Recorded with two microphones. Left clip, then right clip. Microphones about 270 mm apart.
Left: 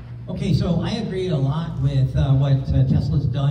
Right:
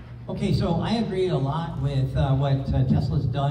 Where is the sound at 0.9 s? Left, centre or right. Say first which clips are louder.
Right 1 dB; right.